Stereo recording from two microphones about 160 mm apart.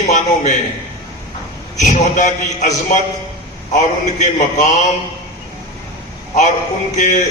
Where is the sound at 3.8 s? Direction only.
45° left (ahead or behind).